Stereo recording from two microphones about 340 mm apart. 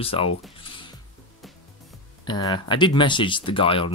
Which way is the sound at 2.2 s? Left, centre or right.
Centre.